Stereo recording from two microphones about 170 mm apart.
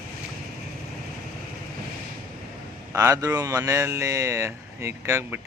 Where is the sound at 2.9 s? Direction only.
20° right (ahead or behind).